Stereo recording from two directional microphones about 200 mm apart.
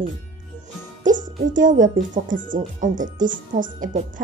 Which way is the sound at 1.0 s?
40° right (ahead or behind).